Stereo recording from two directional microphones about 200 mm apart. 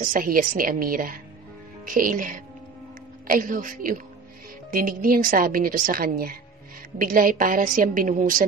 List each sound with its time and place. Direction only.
0.0 s a woman's voice: 45° right (ahead or behind)